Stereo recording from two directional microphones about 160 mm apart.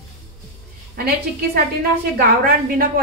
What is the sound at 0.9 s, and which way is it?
A woman's voice, 70° right (ahead or behind).